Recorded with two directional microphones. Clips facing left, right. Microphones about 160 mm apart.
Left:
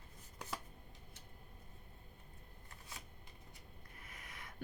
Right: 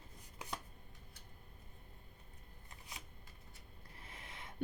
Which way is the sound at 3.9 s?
30° right (ahead or behind).